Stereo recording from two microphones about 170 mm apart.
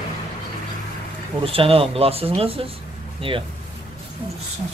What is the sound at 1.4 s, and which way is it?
Speech, 35° right (ahead or behind).